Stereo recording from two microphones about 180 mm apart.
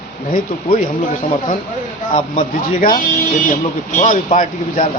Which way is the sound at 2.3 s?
50° left (ahead or behind).